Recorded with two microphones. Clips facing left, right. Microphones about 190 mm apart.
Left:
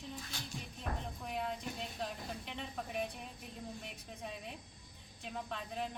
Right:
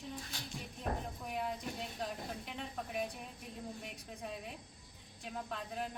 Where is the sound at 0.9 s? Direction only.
30° right (ahead or behind).